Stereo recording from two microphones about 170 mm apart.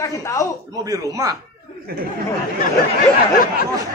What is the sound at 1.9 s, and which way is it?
Speech, 60° right (ahead or behind).